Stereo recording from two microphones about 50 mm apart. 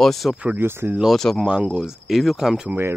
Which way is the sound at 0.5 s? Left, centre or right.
Right.